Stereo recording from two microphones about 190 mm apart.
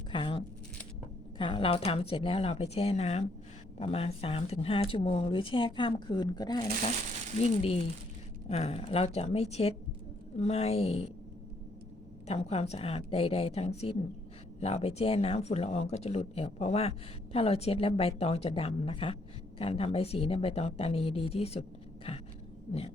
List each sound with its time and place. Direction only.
0.1 s a sound: 25° left (ahead or behind)
1.4 s speech: 30° left (ahead or behind)
12.3 s speech: 30° left (ahead or behind)